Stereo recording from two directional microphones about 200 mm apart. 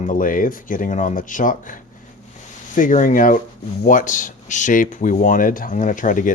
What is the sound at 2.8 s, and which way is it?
Speech, 40° left (ahead or behind).